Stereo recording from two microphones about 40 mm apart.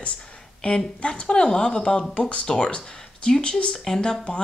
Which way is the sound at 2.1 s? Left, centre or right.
Left.